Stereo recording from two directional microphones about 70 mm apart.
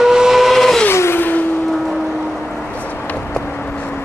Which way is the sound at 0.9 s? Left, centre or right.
Left.